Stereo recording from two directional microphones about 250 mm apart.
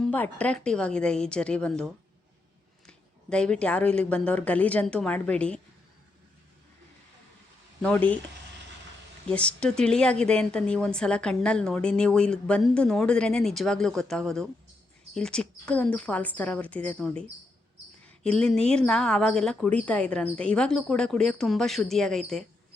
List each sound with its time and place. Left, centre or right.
0.0 s a woman's voice: centre
7.8 s a woman's voice: centre
9.2 s a woman's voice: centre